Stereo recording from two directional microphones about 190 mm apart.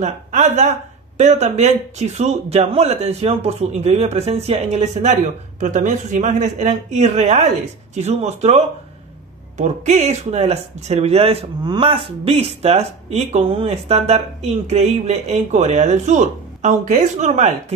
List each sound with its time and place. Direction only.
0.0 s speech: 40° right (ahead or behind)